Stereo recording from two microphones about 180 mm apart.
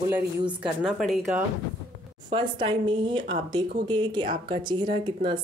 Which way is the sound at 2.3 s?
25° right (ahead or behind).